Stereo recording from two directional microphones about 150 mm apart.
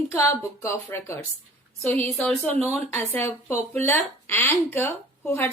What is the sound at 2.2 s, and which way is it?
Speech, centre (ahead or behind).